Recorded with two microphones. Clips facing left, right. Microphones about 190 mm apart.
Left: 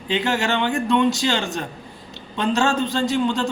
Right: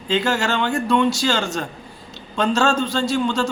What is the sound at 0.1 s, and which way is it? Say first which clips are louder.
A man's voice: right 1 dB; 15° left (ahead or behind).